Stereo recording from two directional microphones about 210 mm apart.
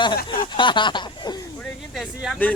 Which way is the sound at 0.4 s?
20° left (ahead or behind).